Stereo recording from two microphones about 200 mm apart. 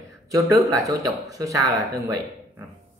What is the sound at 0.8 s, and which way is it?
Speech, 15° right (ahead or behind).